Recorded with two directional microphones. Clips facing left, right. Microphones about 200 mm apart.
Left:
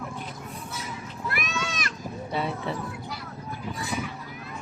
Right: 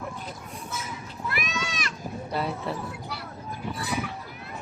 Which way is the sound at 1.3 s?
50° left (ahead or behind).